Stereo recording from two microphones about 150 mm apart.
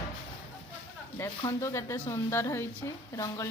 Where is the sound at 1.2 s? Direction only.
20° left (ahead or behind).